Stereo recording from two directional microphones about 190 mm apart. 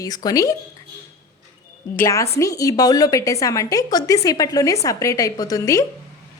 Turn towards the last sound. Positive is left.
turn(degrees=15)  # may be behind; listen again after turning